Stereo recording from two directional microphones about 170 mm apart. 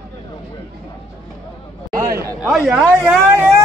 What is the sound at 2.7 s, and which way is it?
Speech, 5° right (ahead or behind).